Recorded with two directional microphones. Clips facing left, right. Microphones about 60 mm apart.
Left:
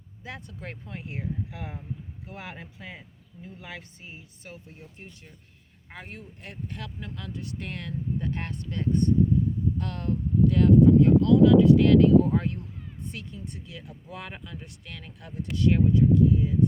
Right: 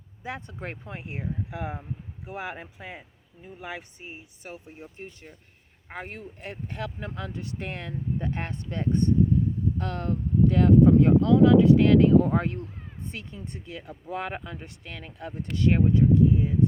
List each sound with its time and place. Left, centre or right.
0.2 s speech: right